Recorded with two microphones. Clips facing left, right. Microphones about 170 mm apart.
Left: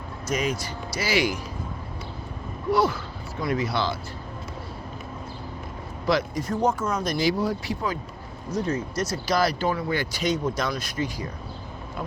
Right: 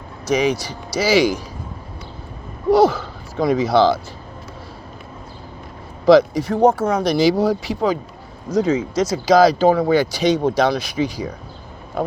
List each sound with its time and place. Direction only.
0.3 s speech: 75° right (ahead or behind); by 1.4 s 90° right
2.6 s speech: 90° right
6.1 s speech: 80° right